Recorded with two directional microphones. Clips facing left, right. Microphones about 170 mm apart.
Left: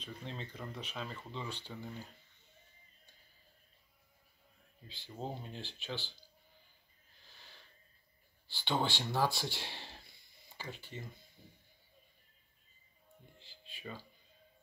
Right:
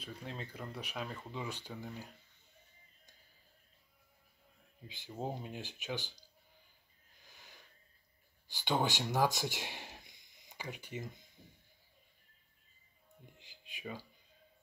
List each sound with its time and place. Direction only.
0.0 s speech: 10° right (ahead or behind)
4.8 s speech: 15° right (ahead or behind)
7.2 s a sound: 15° right (ahead or behind)
8.5 s speech: 15° right (ahead or behind)
13.4 s music: 15° right (ahead or behind)